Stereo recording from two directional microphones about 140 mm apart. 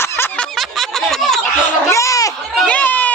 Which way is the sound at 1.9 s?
20° left (ahead or behind).